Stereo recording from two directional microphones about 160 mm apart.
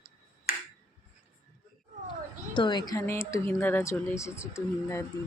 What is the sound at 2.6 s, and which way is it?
Speech, 30° left (ahead or behind).